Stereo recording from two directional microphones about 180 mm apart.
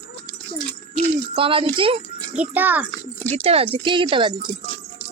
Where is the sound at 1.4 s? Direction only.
30° right (ahead or behind).